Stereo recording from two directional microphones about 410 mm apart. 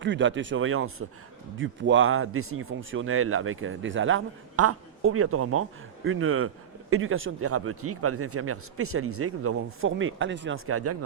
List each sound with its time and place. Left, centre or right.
0.0 s speech: right